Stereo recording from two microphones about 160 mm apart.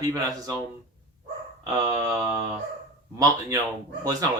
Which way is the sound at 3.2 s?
20° right (ahead or behind).